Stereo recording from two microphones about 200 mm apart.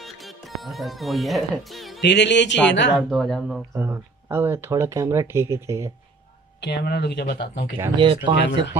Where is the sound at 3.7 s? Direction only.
10° right (ahead or behind).